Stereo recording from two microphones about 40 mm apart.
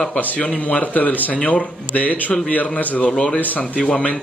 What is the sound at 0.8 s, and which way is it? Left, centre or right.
Speech, left.